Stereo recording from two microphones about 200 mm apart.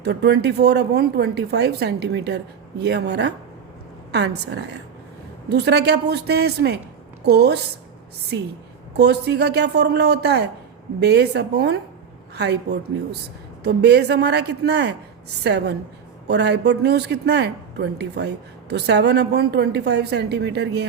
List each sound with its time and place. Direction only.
0.0 s a woman's voice: 55° right (ahead or behind)
9.0 s a woman's voice: 55° right (ahead or behind)